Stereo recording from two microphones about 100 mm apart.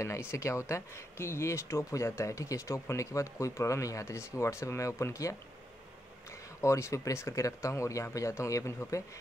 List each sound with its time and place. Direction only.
0.0 s speech: 30° left (ahead or behind)
6.6 s speech: 30° left (ahead or behind)